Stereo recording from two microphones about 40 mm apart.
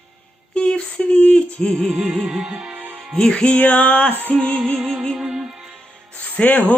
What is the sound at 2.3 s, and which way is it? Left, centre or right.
Music, right.